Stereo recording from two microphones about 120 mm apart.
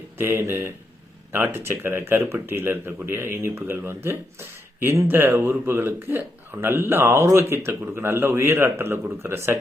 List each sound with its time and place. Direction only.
0.2 s speech: 20° right (ahead or behind)